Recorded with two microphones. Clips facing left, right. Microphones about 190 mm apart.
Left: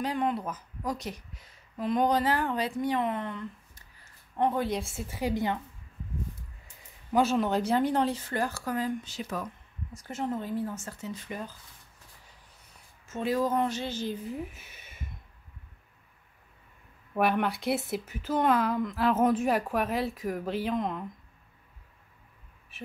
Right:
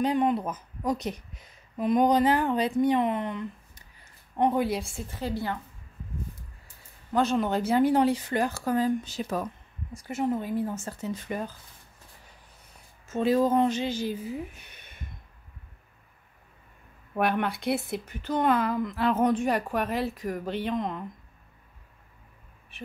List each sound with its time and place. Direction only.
0.0 s speech: 20° right (ahead or behind)
4.7 s a woman's voice: 5° left (ahead or behind)
7.1 s speech: 5° left (ahead or behind); by 9.5 s 35° right (ahead or behind)
9.9 s speech: 10° right (ahead or behind)
10.7 s speech: 25° right (ahead or behind)
11.0 s speech: 50° right (ahead or behind)
13.0 s speech: 30° right (ahead or behind); by 15.0 s 5° left (ahead or behind)
17.1 s speech: centre (ahead or behind)
22.7 s speech: centre (ahead or behind)